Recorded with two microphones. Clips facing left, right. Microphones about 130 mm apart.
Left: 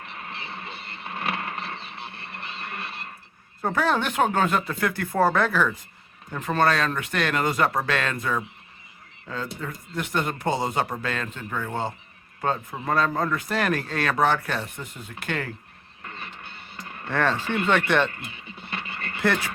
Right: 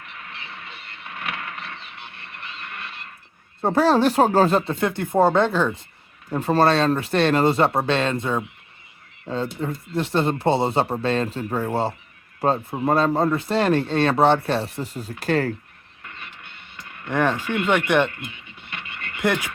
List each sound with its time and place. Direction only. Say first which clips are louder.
0.0 s vehicle: left 2 dB; 30° left (ahead or behind)
3.6 s speech: right 7 dB; 30° right (ahead or behind)
16.0 s music: left 2 dB; 35° left (ahead or behind)
17.1 s speech: right 3 dB; 15° right (ahead or behind)
17.4 s speech: right 2 dB; 30° left (ahead or behind)
17.7 s speech: right 3 dB; 15° right (ahead or behind)
18.1 s a sound: right 1 dB; 35° left (ahead or behind)
19.2 s speech: right 2 dB; 15° right (ahead or behind)